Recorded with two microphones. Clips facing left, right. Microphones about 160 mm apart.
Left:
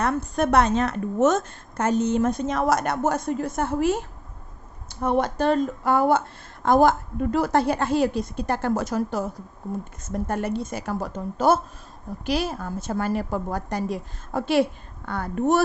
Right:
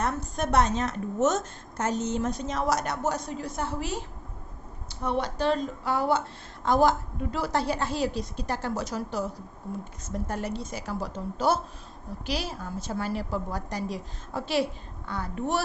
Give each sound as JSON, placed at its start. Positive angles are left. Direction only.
{"t": 0.0, "sound": "a woman's voice", "side_deg": 60}